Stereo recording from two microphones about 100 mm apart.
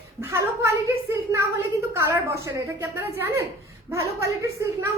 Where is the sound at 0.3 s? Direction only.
30° right (ahead or behind).